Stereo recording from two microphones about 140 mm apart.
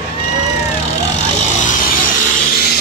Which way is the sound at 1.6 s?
75° left (ahead or behind).